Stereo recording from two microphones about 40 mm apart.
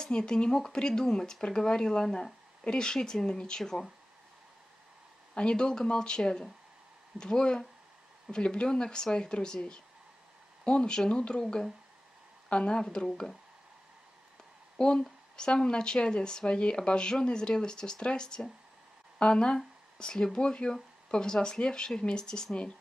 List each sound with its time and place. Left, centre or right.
0.0 s speech: left
2.6 s speech: centre
5.3 s speech: left
14.8 s speech: left